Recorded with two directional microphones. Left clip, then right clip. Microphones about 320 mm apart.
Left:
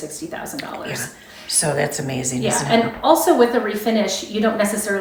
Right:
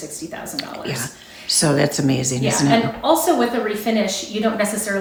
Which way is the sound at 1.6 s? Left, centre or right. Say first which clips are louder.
Right 2 dB; right.